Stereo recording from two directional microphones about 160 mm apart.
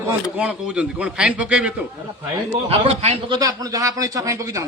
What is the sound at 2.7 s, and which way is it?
Speech, 40° right (ahead or behind).